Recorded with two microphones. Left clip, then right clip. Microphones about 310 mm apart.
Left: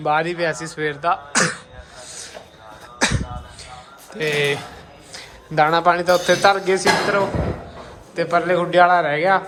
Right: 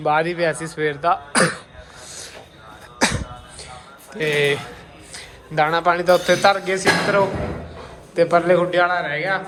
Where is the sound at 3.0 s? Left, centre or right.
Centre.